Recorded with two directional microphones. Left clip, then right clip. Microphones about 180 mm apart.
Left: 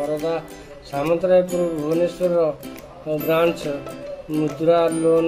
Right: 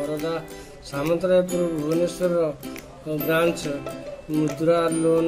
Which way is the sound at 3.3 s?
20° right (ahead or behind).